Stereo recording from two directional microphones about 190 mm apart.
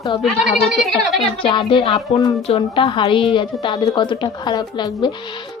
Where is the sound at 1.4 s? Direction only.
25° left (ahead or behind).